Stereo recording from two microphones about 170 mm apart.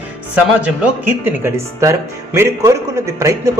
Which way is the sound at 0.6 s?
10° right (ahead or behind).